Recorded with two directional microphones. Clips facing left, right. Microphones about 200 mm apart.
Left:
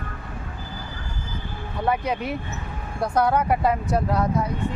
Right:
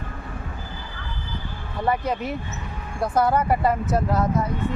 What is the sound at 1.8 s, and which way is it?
Speech, centre (ahead or behind).